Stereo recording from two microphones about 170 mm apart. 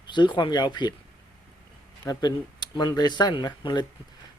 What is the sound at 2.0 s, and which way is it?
Speech, 20° left (ahead or behind).